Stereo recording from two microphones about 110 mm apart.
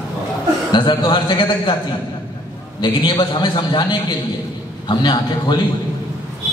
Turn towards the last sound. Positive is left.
turn(degrees=45)  # may be behind; listen again after turning